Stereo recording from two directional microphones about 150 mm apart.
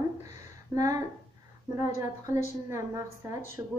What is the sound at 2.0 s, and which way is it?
A woman's voice, 20° right (ahead or behind).